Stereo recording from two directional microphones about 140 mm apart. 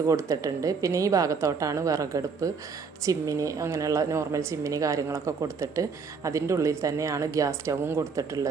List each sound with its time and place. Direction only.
0.1 s a woman's voice: 25° right (ahead or behind)